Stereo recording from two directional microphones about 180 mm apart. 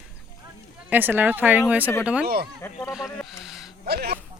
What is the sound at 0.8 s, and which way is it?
Speech, 10° right (ahead or behind).